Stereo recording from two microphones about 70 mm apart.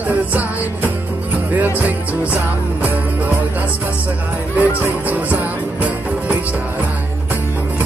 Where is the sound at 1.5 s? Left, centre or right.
Right.